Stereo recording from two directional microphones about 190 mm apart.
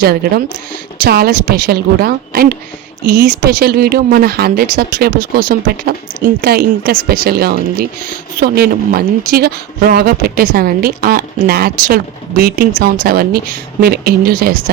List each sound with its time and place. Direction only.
0.0 s a woman's voice: 55° right (ahead or behind)